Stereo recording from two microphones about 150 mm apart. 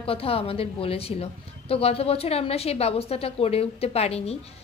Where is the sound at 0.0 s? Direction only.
40° left (ahead or behind).